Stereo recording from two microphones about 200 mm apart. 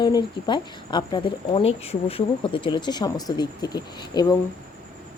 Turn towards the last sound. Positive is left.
turn(degrees=20)  # may be behind; listen again after turning